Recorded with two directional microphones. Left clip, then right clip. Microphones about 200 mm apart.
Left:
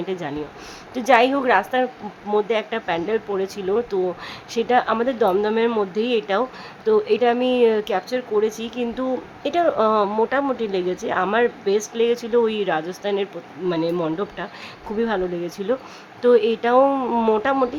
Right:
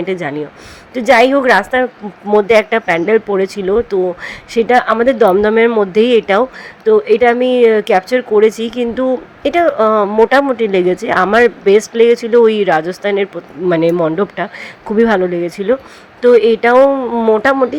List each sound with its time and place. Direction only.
0.0 s speech: 25° right (ahead or behind)
16.9 s speech: 10° right (ahead or behind)
17.4 s speech: 25° right (ahead or behind)